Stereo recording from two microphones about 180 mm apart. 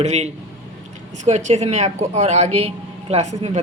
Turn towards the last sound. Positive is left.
turn(degrees=-35)  # may be behind; listen again after turning